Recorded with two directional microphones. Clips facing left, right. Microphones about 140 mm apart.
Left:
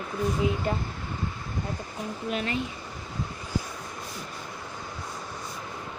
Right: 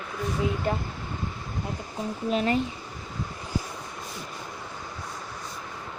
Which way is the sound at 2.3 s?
35° right (ahead or behind).